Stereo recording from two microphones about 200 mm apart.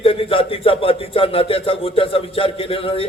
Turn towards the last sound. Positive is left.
turn(degrees=25)  # may be behind; listen again after turning